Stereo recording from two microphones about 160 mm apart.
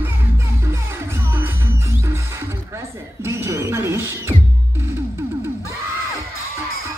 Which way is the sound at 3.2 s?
15° right (ahead or behind).